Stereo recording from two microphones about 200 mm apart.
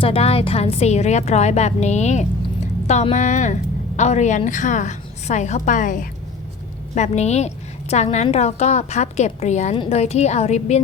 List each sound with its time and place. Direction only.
0.0 s a woman's voice: 30° left (ahead or behind)